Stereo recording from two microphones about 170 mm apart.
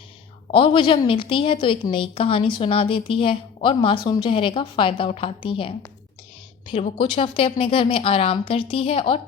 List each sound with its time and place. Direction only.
0.5 s a woman's voice: 30° left (ahead or behind)